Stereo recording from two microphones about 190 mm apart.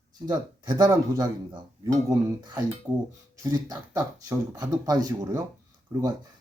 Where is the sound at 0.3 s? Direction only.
20° right (ahead or behind).